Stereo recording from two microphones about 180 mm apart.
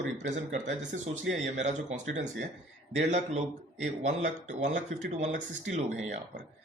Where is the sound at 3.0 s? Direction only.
40° right (ahead or behind).